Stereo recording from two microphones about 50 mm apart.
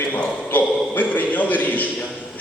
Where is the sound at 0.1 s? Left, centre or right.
Left.